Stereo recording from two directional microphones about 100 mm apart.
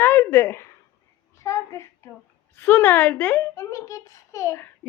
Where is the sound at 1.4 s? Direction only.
30° left (ahead or behind).